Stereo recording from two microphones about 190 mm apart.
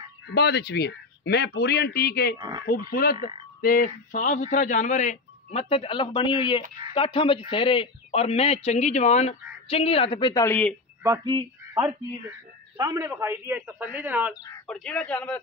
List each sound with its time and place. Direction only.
0.3 s a man's voice: 60° left (ahead or behind)
2.3 s speech: 25° right (ahead or behind)
2.6 s speech: 50° left (ahead or behind); by 10.4 s 25° left (ahead or behind)
10.4 s a man's voice: 5° left (ahead or behind)
11.0 s a man's voice: 20° right (ahead or behind)
14.7 s a man's voice: 5° left (ahead or behind)